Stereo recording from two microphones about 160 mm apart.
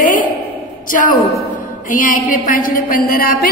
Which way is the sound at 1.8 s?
55° left (ahead or behind).